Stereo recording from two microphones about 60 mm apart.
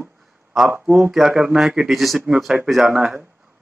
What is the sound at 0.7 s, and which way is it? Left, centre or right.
Speech, centre.